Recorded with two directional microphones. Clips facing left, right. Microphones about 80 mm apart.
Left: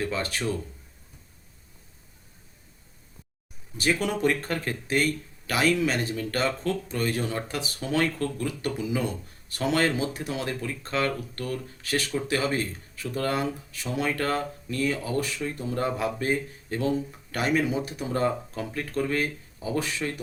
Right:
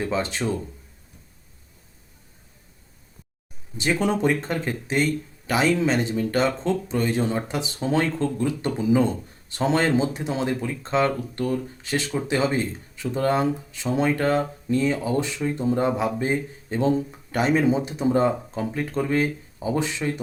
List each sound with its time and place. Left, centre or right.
0.0 s speech: right
3.8 s speech: right